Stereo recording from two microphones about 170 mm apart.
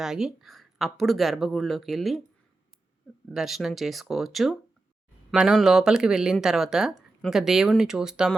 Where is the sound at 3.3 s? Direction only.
Centre (ahead or behind).